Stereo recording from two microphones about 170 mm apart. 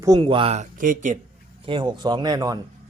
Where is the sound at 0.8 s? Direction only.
50° right (ahead or behind).